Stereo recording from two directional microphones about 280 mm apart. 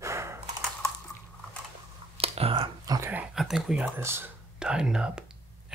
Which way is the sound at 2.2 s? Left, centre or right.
Right.